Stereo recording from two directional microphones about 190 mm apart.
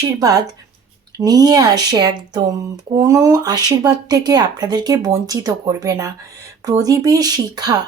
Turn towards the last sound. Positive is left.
turn(degrees=-20)  # may be behind; listen again after turning